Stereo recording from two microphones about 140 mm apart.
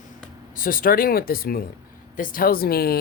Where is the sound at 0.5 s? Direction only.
85° left.